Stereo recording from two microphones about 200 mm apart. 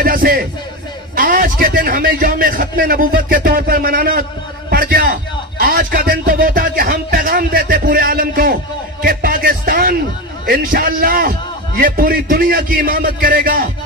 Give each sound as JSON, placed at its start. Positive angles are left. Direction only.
{"t": 0.0, "sound": "a man's voice", "side_deg": -45}
{"t": 9.0, "sound": "music", "side_deg": -45}
{"t": 10.4, "sound": "a man's voice", "side_deg": -45}